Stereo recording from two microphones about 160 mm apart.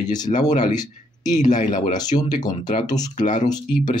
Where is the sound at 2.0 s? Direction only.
25° left (ahead or behind).